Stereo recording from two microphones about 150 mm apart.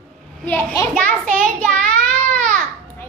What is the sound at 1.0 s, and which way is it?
Speech, 10° left (ahead or behind).